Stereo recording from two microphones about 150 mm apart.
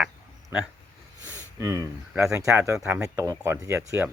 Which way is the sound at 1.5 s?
20° right (ahead or behind).